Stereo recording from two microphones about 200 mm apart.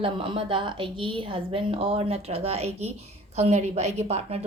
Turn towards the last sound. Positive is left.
turn(degrees=-30)  # may be behind; listen again after turning